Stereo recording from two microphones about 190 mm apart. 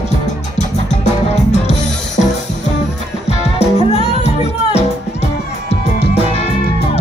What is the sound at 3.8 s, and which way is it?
Music, 35° left (ahead or behind).